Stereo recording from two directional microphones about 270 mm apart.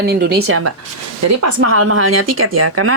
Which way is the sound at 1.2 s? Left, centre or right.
Right.